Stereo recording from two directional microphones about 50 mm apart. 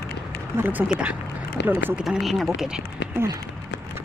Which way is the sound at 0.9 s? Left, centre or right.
Right.